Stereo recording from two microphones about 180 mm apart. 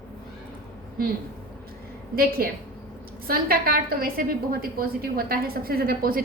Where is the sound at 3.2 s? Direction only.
55° right (ahead or behind).